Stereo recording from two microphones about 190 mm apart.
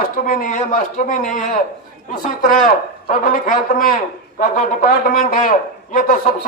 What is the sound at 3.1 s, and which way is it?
Speech, 45° left (ahead or behind).